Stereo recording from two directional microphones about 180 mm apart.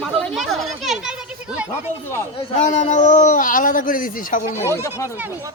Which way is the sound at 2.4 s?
40° left (ahead or behind).